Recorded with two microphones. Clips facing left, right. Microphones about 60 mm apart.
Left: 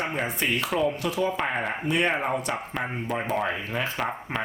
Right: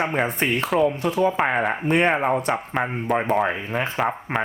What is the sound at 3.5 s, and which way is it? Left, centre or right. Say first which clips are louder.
Speech: right 4 dB; right.